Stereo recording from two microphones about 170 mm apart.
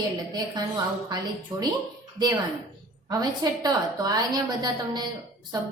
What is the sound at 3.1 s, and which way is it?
A woman's voice, 20° right (ahead or behind).